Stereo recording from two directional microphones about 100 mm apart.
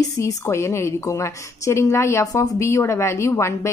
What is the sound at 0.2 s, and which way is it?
A woman's voice, 30° left (ahead or behind).